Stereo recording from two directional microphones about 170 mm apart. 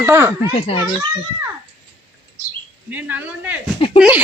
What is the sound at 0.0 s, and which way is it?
Speech, 15° right (ahead or behind).